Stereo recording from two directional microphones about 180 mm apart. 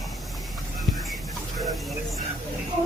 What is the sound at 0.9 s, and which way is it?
Music, centre (ahead or behind).